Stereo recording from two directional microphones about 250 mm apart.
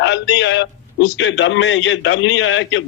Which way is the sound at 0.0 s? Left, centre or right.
Left.